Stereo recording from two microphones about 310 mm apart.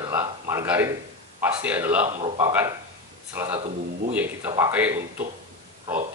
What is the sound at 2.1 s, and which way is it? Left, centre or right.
Speech, right.